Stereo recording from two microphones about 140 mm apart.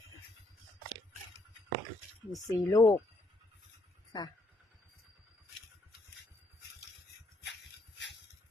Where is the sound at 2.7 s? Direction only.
30° left (ahead or behind).